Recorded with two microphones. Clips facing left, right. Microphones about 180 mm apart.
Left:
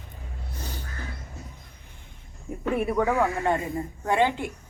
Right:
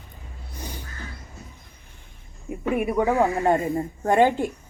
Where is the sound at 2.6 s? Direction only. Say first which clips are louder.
Right 2 dB; 15° right (ahead or behind).